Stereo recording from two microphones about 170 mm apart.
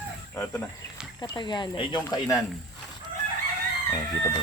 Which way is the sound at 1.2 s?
25° left (ahead or behind).